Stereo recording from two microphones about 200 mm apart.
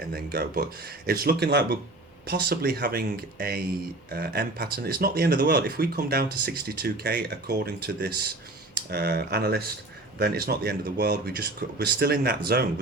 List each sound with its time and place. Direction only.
0.1 s speech: 50° right (ahead or behind)